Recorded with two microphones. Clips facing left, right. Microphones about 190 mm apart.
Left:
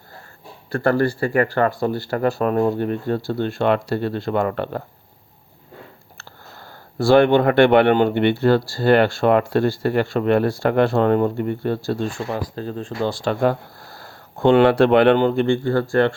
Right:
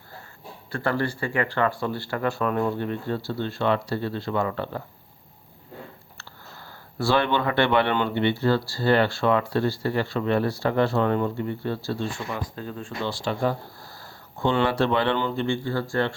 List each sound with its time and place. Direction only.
0.7 s speech: 45° left (ahead or behind); by 4.8 s 60° left (ahead or behind)
6.1 s speech: 50° left (ahead or behind)
12.5 s speech: 35° left (ahead or behind); by 16.1 s 60° left (ahead or behind)